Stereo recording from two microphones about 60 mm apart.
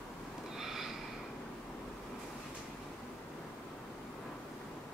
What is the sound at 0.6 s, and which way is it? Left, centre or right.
Snort, centre.